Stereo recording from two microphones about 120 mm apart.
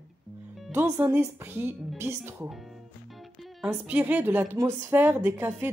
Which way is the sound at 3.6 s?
10° right (ahead or behind).